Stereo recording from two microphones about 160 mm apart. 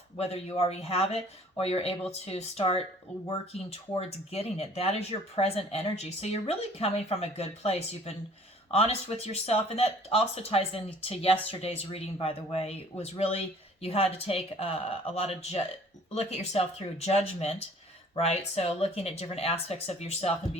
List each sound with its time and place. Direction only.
0.2 s speech: 40° left (ahead or behind)